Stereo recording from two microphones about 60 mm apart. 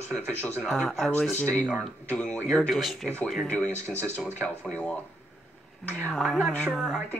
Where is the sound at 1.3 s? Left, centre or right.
Left.